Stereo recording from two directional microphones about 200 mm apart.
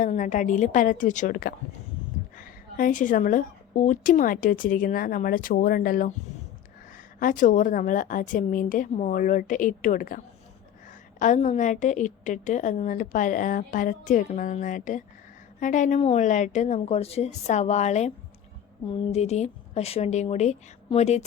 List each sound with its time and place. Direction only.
0.0 s a woman's voice: 40° left (ahead or behind)
7.2 s a woman's voice: 40° left (ahead or behind)
11.2 s a woman's voice: 40° left (ahead or behind)